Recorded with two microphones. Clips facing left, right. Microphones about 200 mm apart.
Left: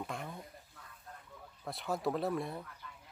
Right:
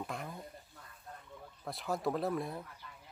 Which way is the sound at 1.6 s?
Centre (ahead or behind).